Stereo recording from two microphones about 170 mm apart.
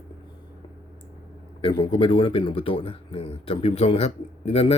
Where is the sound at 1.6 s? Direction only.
30° left (ahead or behind).